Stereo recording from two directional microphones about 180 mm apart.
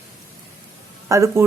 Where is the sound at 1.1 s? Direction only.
15° right (ahead or behind).